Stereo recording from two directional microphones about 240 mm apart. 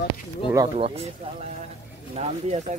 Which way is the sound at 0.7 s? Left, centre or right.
Right.